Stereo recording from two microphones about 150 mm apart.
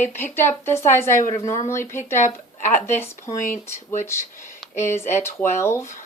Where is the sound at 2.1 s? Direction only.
55° left (ahead or behind).